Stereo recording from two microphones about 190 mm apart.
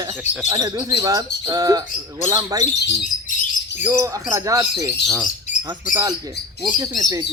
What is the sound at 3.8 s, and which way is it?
Speech, 15° right (ahead or behind).